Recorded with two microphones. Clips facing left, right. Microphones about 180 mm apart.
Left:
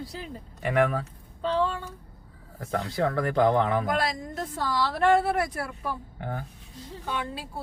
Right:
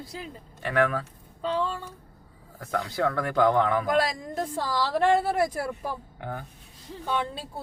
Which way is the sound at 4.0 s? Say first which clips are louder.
Right 3 dB; 35° right (ahead or behind).